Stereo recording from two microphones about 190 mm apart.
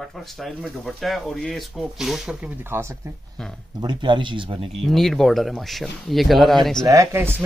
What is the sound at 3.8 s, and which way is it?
Speech, 25° right (ahead or behind).